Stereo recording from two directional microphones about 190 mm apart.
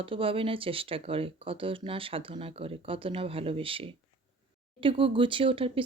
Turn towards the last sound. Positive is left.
turn(degrees=-30)  # may be behind; listen again after turning